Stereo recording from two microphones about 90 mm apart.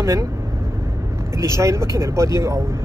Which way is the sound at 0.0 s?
35° right (ahead or behind).